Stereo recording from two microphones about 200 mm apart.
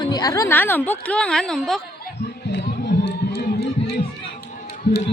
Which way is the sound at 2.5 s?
60° left (ahead or behind).